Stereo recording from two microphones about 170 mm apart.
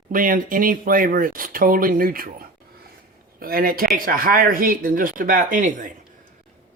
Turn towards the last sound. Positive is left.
turn(degrees=-50)  # may be behind; listen again after turning